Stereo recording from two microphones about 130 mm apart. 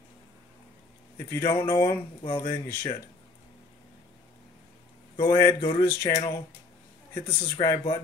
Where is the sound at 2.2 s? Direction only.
40° left (ahead or behind).